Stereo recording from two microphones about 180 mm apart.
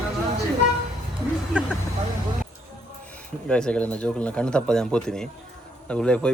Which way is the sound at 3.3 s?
5° left (ahead or behind).